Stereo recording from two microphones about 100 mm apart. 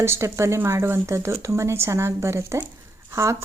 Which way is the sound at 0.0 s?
30° right (ahead or behind).